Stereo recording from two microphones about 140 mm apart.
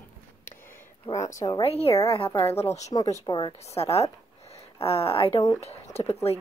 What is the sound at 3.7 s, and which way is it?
Speech, 45° left (ahead or behind).